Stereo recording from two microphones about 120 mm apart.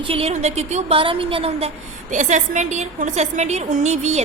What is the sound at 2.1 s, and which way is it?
A woman's voice, 90° right.